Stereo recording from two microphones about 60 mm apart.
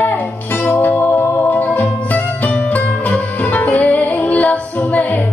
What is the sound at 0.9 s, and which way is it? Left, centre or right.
Music, left.